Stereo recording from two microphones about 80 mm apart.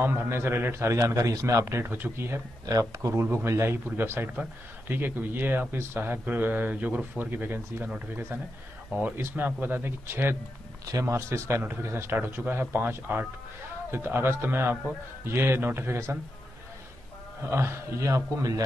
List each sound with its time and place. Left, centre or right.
0.0 s a man's voice: right
2.6 s a man's voice: right
9.0 s speech: right
10.9 s a man's voice: right
17.4 s a man's voice: right